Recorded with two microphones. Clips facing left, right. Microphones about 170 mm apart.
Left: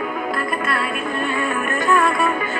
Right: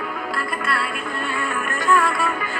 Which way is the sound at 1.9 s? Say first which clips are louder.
Left 2 dB; 20° left (ahead or behind).